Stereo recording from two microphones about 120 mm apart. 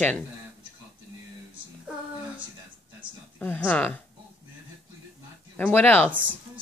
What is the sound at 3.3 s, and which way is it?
Speech, 15° left (ahead or behind).